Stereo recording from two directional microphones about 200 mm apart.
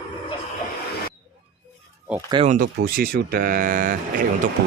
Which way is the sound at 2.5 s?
45° right (ahead or behind).